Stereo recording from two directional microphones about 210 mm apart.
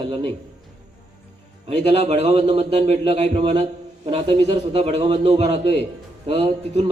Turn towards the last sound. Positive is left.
turn(degrees=-30)  # may be behind; listen again after turning